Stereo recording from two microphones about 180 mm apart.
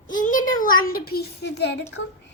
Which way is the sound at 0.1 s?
45° left (ahead or behind).